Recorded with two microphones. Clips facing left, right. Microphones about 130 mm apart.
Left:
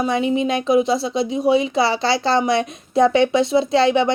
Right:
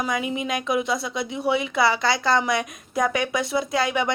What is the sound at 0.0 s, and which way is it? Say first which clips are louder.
Speech: left 7 dB; 25° left (ahead or behind).